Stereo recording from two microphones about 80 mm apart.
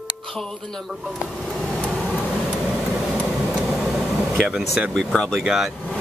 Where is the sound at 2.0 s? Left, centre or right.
Centre.